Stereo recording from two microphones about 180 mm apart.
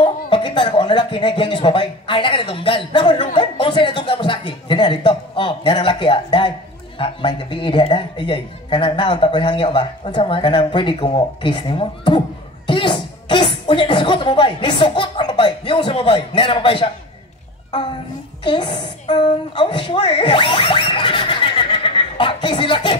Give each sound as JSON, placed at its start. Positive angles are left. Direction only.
{"t": 0.0, "sound": "speech", "side_deg": 25}
{"t": 18.4, "sound": "a woman's voice", "side_deg": 25}